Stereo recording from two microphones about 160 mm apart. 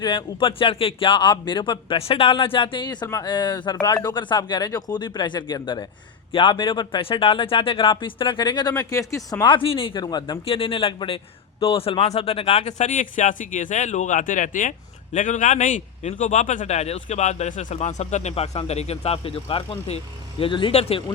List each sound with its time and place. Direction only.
0.0 s speech: 30° left (ahead or behind)